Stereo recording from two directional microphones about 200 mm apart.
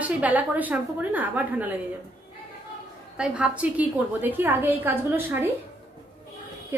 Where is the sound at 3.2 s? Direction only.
5° right (ahead or behind).